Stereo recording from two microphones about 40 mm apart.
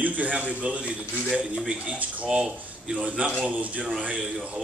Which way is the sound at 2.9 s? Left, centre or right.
Right.